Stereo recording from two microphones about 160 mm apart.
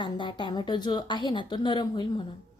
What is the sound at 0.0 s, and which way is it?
A woman's voice, 30° left (ahead or behind).